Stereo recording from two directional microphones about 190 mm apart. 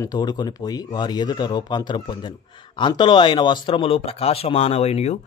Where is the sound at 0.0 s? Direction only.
20° left (ahead or behind).